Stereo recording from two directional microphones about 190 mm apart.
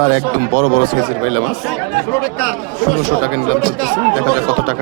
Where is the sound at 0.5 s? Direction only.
40° right (ahead or behind).